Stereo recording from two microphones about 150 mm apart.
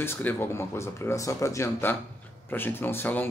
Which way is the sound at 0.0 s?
15° left (ahead or behind).